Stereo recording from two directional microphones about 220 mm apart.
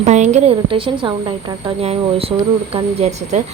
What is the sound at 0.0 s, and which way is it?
A woman's voice, 30° right (ahead or behind).